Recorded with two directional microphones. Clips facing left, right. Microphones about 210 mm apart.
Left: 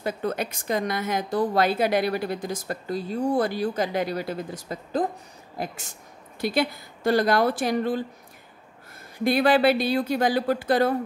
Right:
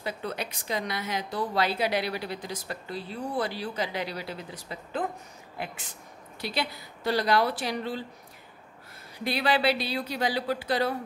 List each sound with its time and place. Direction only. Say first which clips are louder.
0.0 s a woman's voice: left 6 dB; 50° left (ahead or behind)
9.2 s a woman's voice: left 7 dB; 50° left (ahead or behind)